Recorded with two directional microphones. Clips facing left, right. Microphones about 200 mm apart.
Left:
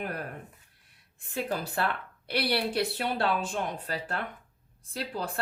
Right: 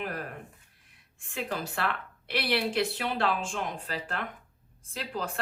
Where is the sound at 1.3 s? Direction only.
35° left (ahead or behind).